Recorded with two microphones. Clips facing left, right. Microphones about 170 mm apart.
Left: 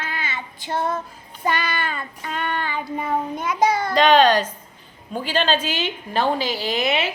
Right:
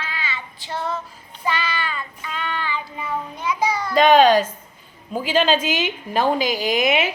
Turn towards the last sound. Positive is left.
turn(degrees=-10)  # may be behind; listen again after turning